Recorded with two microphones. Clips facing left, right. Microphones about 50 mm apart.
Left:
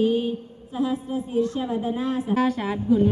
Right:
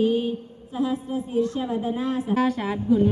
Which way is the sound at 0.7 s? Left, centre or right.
Left.